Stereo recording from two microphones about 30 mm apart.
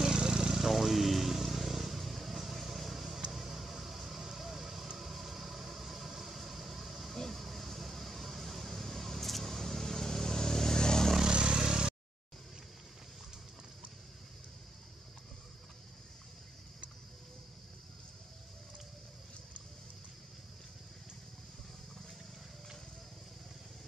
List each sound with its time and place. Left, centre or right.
0.0 s vehicle: right
0.6 s vehicle: centre
3.3 s a sound: centre
4.2 s vehicle: centre; by 11.1 s left
11.2 s vehicle: right
11.5 s vehicle: right